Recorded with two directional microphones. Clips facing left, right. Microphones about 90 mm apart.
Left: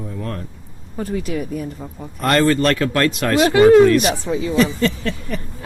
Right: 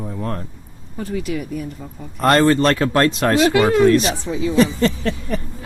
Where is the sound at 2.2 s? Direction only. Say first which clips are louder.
Right 2 dB; 30° right (ahead or behind).